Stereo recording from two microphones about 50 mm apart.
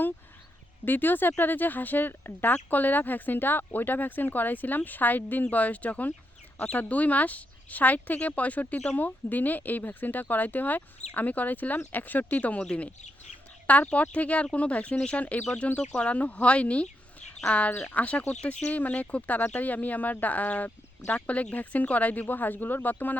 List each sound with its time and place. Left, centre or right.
0.9 s speech: left